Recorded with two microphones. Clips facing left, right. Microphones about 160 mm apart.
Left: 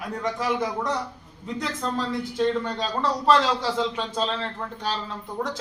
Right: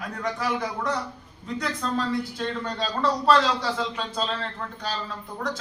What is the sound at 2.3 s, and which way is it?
Speech, 20° left (ahead or behind).